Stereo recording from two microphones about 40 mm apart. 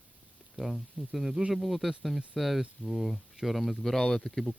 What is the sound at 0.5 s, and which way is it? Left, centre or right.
Speech, centre.